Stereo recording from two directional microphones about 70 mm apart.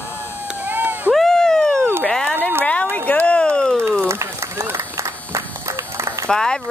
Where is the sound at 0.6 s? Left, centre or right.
Right.